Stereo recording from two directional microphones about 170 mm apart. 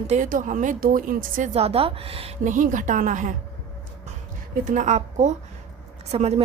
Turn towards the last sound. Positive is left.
turn(degrees=-40)  # may be behind; listen again after turning